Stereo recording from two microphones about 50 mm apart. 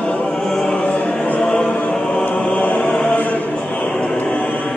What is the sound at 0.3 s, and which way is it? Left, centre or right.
Choir, centre.